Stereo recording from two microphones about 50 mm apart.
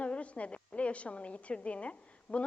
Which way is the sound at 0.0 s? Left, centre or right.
Left.